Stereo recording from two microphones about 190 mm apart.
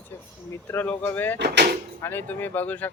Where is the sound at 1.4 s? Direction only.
60° right (ahead or behind).